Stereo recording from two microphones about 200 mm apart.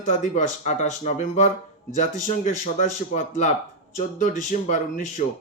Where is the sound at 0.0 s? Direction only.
40° left (ahead or behind).